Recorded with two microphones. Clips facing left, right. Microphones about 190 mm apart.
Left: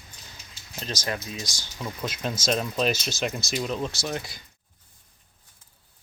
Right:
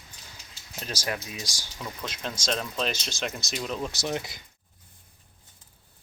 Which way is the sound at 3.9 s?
20° right (ahead or behind).